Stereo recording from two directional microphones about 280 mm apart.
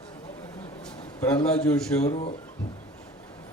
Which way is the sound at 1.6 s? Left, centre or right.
Centre.